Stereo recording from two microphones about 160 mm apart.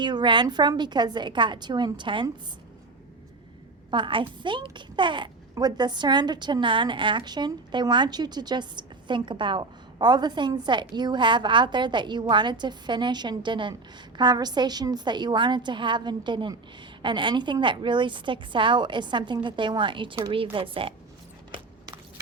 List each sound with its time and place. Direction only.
0.0 s a child's voice: 30° right (ahead or behind)
3.9 s a child's voice: 30° right (ahead or behind)